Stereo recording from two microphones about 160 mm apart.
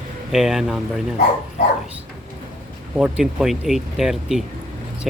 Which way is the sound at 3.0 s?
5° right (ahead or behind).